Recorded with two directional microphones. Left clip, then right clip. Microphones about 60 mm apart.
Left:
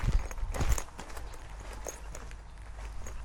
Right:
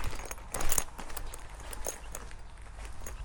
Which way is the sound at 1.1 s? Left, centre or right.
Right.